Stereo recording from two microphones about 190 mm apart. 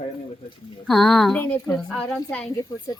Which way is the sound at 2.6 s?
20° left (ahead or behind).